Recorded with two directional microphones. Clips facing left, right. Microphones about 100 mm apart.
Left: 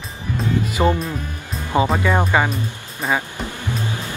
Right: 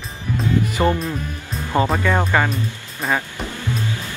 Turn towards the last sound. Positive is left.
turn(degrees=10)  # may be behind; listen again after turning